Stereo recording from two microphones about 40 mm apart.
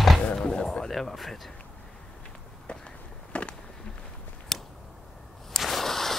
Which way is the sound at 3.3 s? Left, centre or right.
Left.